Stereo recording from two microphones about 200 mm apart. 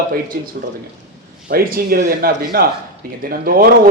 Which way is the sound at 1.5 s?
45° right (ahead or behind).